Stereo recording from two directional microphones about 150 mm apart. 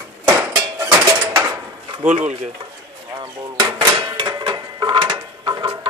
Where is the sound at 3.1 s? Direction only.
30° right (ahead or behind).